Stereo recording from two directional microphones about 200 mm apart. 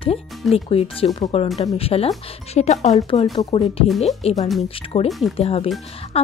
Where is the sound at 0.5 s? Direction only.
30° left (ahead or behind).